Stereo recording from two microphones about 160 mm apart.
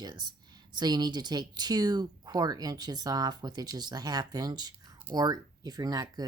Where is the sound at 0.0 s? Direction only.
25° right (ahead or behind).